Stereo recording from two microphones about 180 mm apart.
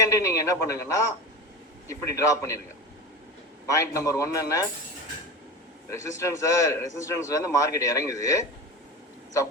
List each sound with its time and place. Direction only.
0.0 s a sound: 15° left (ahead or behind)
1.9 s a man's voice: 20° left (ahead or behind)
3.7 s a man's voice: 15° left (ahead or behind)
5.9 s a man's voice: 15° left (ahead or behind)